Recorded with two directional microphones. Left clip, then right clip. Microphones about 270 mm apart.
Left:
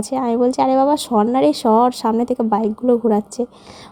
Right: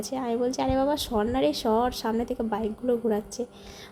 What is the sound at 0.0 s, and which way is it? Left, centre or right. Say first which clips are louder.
Speech: left 10 dB; left.